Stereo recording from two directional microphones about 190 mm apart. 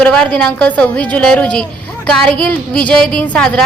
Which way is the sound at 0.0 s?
5° left (ahead or behind).